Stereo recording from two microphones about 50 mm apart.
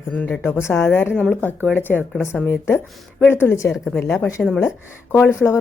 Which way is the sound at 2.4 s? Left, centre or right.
Left.